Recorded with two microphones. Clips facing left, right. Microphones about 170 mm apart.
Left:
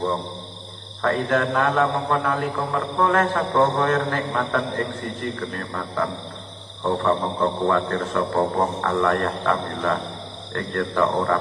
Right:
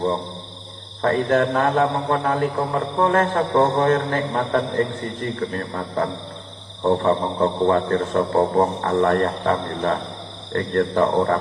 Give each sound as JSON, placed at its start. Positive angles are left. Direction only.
{"t": 1.3, "sound": "mantra", "side_deg": -40}